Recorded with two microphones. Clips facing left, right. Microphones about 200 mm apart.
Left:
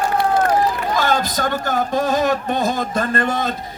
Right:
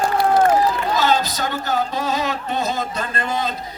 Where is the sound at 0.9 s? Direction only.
50° left (ahead or behind).